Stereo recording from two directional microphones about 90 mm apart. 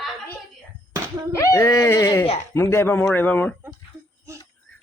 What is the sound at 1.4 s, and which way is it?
Speech, 30° left (ahead or behind).